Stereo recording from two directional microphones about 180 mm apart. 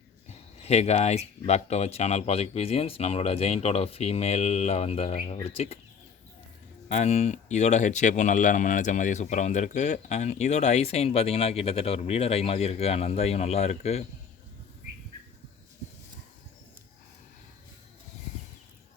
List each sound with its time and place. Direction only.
0.6 s speech: 35° left (ahead or behind)
6.8 s speech: 40° left (ahead or behind)